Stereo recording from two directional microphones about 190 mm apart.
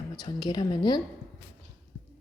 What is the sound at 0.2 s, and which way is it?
Speech, 20° left (ahead or behind).